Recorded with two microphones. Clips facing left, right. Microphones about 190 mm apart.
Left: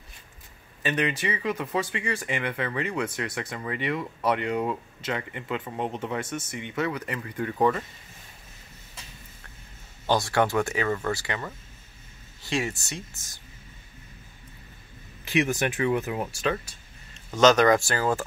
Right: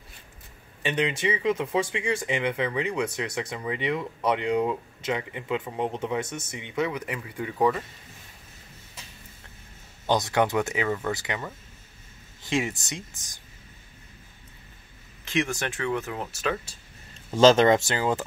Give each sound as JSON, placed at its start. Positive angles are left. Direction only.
{"t": 0.8, "sound": "speech", "side_deg": -20}
{"t": 10.0, "sound": "speech", "side_deg": -20}
{"t": 15.3, "sound": "speech", "side_deg": 15}
{"t": 17.3, "sound": "speech", "side_deg": -30}